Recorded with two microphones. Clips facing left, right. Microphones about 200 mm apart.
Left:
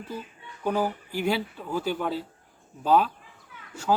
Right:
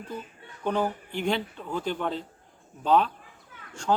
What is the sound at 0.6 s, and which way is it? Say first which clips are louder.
Speech: left 1 dB; 5° left (ahead or behind).